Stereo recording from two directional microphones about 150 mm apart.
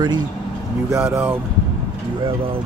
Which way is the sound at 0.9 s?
15° right (ahead or behind).